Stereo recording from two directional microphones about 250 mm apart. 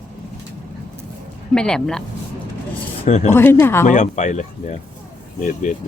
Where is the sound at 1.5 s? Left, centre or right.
Centre.